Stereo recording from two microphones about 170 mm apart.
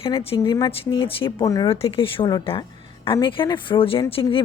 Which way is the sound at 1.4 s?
20° left (ahead or behind).